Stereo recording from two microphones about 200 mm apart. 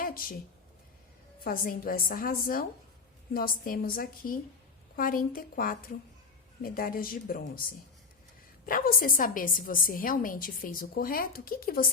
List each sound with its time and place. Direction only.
0.0 s a sound: 45° left (ahead or behind)
1.5 s a woman's voice: 45° left (ahead or behind)
8.6 s a woman's voice: 45° left (ahead or behind)